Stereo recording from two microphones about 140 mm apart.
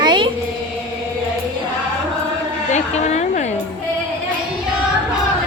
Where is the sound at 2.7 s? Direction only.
55° left (ahead or behind).